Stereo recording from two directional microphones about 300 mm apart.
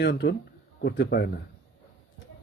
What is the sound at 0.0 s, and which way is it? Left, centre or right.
Speech, left.